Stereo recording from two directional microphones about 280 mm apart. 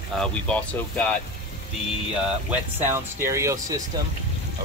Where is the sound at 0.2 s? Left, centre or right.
Centre.